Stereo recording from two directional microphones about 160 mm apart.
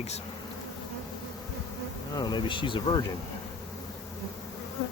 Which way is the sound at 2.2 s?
25° left (ahead or behind).